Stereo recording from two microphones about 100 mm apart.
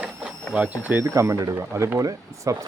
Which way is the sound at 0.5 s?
15° right (ahead or behind).